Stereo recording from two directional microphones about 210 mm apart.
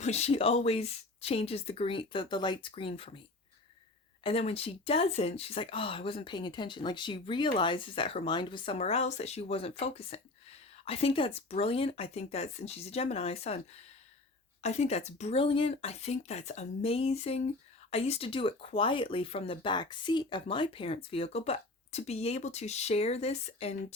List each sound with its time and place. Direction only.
0.0 s speech: 30° left (ahead or behind)
4.2 s speech: 25° left (ahead or behind)